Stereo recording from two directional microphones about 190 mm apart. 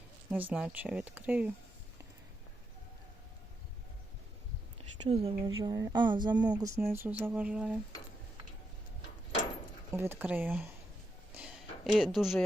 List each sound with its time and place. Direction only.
0.3 s speech: 10° right (ahead or behind)
4.9 s speech: 35° right (ahead or behind)
5.5 s speech: 20° right (ahead or behind); by 7.8 s 5° right (ahead or behind)
9.9 s speech: 10° right (ahead or behind)
11.3 s a sound: centre (ahead or behind)